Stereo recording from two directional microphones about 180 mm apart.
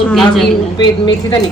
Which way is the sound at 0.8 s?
25° left (ahead or behind).